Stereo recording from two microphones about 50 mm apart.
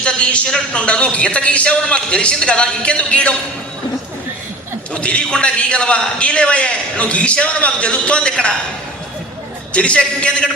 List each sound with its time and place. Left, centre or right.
0.0 s a man's voice: left
4.9 s a man's voice: left
9.7 s a man's voice: left